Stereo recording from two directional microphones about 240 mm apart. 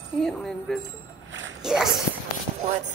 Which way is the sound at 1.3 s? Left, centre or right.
Right.